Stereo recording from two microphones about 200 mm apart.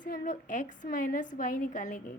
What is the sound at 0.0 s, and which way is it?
A woman's voice, 40° left (ahead or behind).